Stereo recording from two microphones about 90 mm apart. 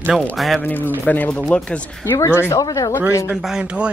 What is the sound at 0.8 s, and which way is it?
Speech, 20° left (ahead or behind).